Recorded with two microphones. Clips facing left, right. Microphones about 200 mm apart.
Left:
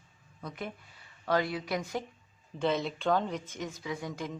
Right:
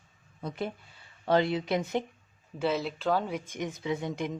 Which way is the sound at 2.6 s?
5° right (ahead or behind).